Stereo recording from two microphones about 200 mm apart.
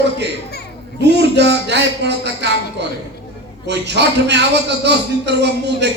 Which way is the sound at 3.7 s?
60° right (ahead or behind).